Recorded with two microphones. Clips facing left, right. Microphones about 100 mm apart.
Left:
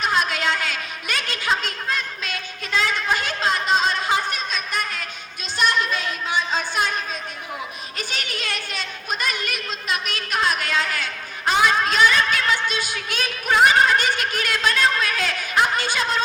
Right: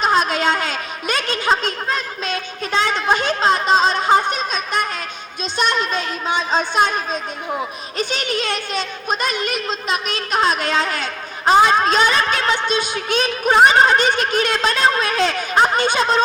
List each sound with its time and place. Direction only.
0.0 s a child's voice: 30° right (ahead or behind)